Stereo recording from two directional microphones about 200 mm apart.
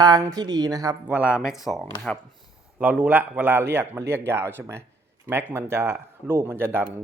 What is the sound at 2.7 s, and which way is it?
Speech, 5° right (ahead or behind).